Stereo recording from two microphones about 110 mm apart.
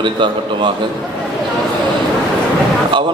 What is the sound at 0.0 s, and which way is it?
Speech, 45° right (ahead or behind).